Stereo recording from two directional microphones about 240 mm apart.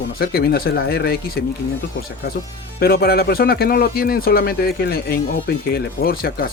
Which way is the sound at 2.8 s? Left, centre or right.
Left.